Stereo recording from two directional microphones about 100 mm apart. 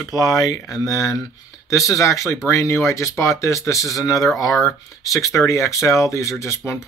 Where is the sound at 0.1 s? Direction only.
35° left (ahead or behind).